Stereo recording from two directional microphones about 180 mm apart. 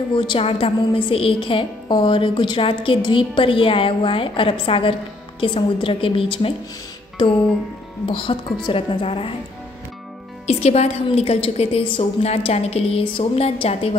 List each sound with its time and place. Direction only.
0.1 s a woman's voice: 25° left (ahead or behind)
8.1 s a woman's voice: 30° left (ahead or behind)
10.4 s a woman's voice: 35° left (ahead or behind)